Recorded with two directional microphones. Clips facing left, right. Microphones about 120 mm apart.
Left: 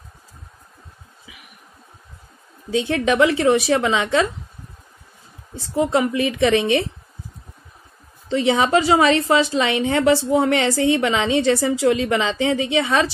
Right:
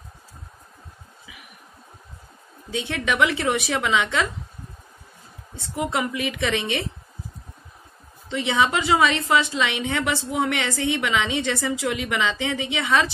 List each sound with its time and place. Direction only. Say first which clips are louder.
2.7 s a woman's voice: left 7 dB; 30° left (ahead or behind)
5.6 s a woman's voice: left 7 dB; 30° left (ahead or behind)
8.3 s a woman's voice: left 5 dB; 35° left (ahead or behind)